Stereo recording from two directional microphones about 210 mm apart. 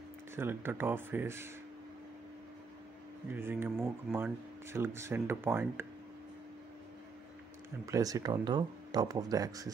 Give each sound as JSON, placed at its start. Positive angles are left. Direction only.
{"t": 0.4, "sound": "speech", "side_deg": -10}
{"t": 3.3, "sound": "speech", "side_deg": -10}
{"t": 7.8, "sound": "speech", "side_deg": -15}